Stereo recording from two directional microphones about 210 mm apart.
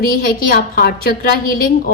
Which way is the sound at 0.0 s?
45° left (ahead or behind).